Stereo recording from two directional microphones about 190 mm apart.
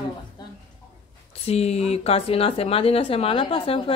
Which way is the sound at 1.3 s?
35° left (ahead or behind).